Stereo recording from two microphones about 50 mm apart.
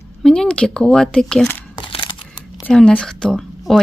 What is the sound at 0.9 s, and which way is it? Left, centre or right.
Speech, centre.